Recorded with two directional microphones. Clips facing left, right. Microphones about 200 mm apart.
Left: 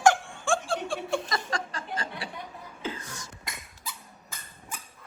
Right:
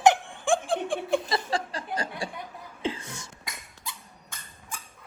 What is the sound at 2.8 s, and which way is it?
Beatboxing, 25° right (ahead or behind).